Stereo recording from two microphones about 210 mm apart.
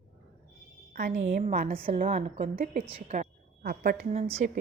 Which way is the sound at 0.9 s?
40° right (ahead or behind).